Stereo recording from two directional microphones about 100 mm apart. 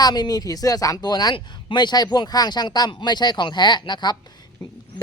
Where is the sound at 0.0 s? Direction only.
45° left (ahead or behind).